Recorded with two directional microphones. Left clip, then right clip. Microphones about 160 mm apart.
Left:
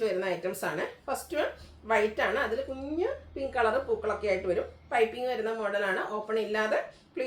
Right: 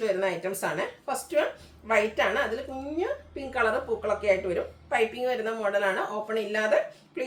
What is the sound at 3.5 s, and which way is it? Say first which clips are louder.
A woman's voice: right 1 dB; 15° right (ahead or behind).